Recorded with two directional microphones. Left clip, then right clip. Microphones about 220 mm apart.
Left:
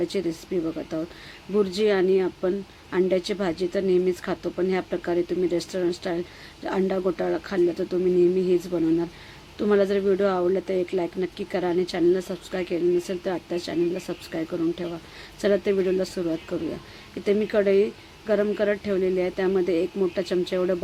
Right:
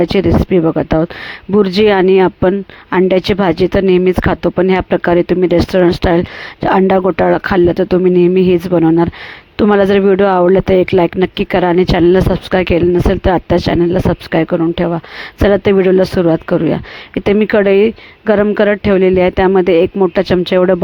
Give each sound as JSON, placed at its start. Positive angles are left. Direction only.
{"t": 0.0, "sound": "speech", "side_deg": -40}